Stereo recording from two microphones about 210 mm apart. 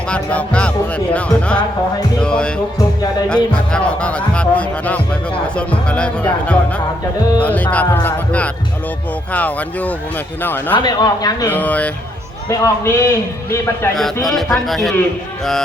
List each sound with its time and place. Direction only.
0.1 s a man's voice: 5° left (ahead or behind)
14.3 s speech: centre (ahead or behind)